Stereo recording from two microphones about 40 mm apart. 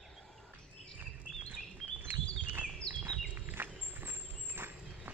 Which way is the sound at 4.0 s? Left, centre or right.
Right.